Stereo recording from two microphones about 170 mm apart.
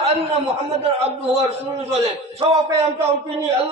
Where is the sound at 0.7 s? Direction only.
40° right (ahead or behind).